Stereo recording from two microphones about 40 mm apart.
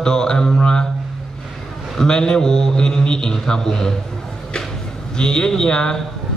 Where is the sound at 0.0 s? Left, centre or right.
Centre.